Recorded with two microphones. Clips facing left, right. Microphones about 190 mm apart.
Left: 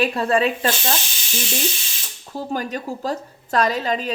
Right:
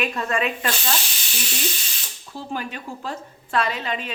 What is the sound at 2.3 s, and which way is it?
Speech, 40° left (ahead or behind).